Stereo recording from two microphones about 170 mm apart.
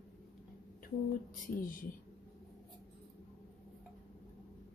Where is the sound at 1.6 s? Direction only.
55° left (ahead or behind).